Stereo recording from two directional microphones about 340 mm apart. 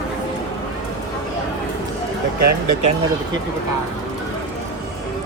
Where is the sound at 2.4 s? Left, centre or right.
Right.